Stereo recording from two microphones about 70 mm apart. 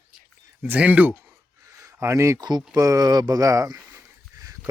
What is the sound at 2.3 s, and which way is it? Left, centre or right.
Speech, right.